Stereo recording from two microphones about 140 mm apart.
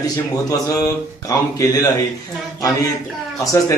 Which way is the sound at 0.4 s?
25° left (ahead or behind).